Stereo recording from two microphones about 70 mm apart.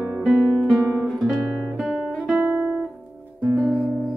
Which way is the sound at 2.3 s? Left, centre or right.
Right.